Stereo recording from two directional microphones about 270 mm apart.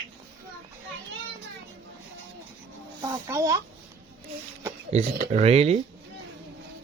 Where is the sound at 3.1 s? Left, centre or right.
Centre.